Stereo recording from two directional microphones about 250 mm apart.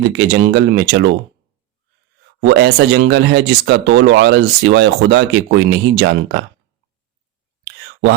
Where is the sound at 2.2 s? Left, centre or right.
Right.